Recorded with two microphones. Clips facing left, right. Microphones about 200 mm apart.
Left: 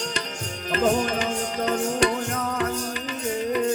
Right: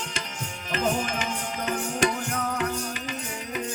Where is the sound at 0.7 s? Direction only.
40° left (ahead or behind).